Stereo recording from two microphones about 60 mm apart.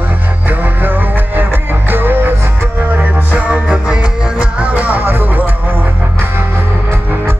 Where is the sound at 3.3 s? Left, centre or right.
Right.